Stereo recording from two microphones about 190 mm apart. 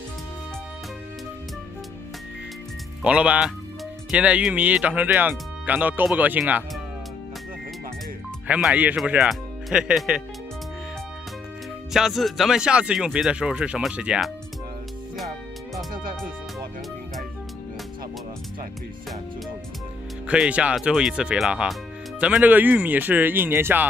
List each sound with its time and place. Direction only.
3.0 s speech: 5° right (ahead or behind)
8.5 s speech: 5° right (ahead or behind)
11.9 s speech: centre (ahead or behind)
15.9 s music: 45° right (ahead or behind)
20.2 s speech: 5° right (ahead or behind)